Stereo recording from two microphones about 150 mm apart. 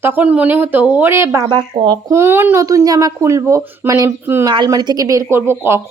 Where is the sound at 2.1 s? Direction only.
15° right (ahead or behind).